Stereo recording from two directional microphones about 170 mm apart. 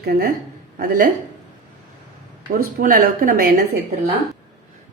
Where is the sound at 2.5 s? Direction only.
60° right (ahead or behind).